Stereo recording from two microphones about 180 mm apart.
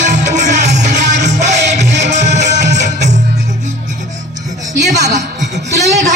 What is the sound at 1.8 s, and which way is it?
Music, 70° right (ahead or behind).